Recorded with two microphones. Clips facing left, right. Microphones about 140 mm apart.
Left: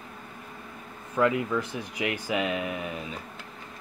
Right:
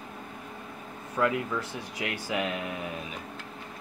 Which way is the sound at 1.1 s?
5° left (ahead or behind).